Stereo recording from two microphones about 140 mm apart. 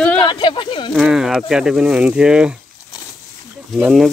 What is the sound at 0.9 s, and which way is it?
Speech, 5° right (ahead or behind).